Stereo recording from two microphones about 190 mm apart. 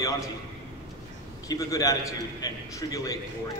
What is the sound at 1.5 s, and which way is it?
A man's voice, 20° left (ahead or behind).